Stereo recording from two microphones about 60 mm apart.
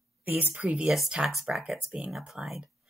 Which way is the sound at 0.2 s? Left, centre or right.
Right.